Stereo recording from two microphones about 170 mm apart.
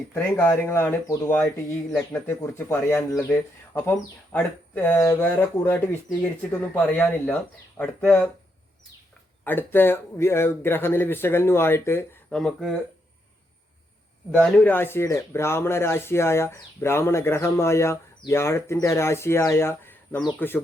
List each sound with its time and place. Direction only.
0.1 s speech: 15° left (ahead or behind)
9.4 s speech: 10° left (ahead or behind)
12.4 s speech: 5° left (ahead or behind)
14.3 s speech: 5° left (ahead or behind)